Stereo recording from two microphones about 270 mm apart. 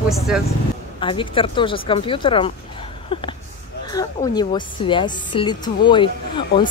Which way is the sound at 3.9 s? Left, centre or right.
Centre.